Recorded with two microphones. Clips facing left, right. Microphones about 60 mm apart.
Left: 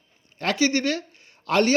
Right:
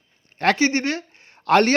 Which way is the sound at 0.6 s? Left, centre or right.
Right.